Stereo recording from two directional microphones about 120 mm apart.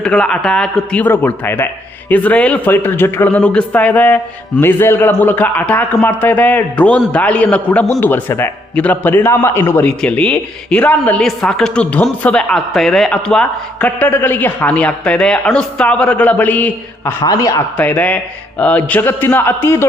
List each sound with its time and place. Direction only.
0.0 s a man's voice: 5° left (ahead or behind)